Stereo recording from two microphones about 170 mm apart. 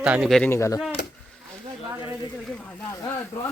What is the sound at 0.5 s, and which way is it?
Speech, 15° left (ahead or behind).